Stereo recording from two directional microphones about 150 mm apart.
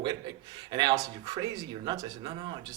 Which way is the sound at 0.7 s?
30° right (ahead or behind).